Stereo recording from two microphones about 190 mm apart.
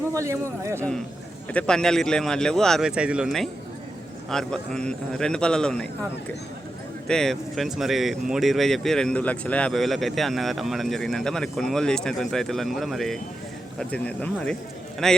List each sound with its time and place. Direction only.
0.1 s speech: 15° right (ahead or behind)
1.5 s speech: 5° left (ahead or behind)
7.1 s speech: centre (ahead or behind)